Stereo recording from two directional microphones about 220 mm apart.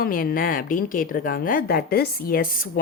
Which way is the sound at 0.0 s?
40° left (ahead or behind).